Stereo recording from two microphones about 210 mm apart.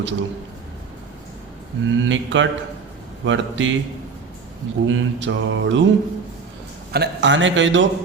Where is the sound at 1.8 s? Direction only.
60° right (ahead or behind).